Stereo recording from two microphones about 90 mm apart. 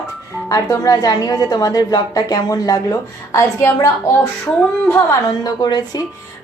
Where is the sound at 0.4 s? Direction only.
40° left (ahead or behind).